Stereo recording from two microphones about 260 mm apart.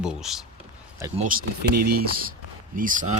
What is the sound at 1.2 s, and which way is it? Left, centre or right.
Speech, right.